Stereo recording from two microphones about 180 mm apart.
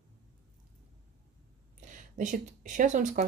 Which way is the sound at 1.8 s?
45° right (ahead or behind).